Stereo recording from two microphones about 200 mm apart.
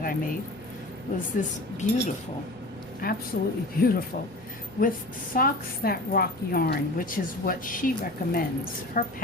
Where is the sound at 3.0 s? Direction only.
45° left (ahead or behind).